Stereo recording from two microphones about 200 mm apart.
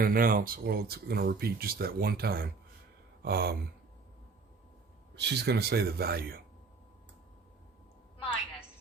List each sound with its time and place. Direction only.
0.0 s speech: 45° right (ahead or behind)
5.1 s speech: 55° right (ahead or behind)